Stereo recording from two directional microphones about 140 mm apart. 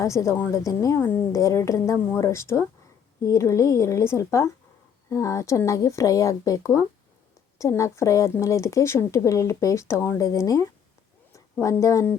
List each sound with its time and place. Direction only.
0.0 s speech: 20° left (ahead or behind)